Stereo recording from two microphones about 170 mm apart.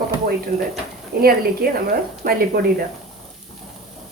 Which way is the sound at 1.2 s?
65° right (ahead or behind).